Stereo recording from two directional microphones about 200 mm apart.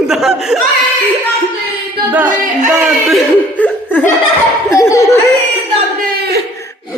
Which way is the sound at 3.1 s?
10° left (ahead or behind).